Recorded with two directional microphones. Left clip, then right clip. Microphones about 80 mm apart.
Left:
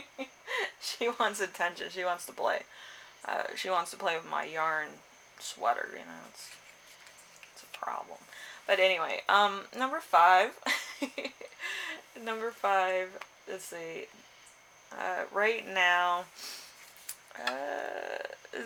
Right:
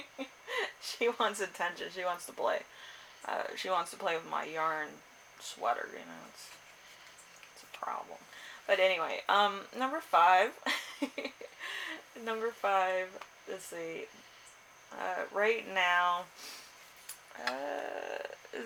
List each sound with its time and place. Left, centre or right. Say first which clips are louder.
0.4 s speech: left 2 dB; left
7.7 s whispering: left 2 dB; left
8.6 s speech: left 2 dB; left
17.6 s speech: left 2 dB; left